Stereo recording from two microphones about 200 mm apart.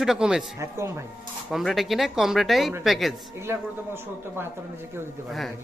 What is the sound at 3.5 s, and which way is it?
Speech, 10° right (ahead or behind).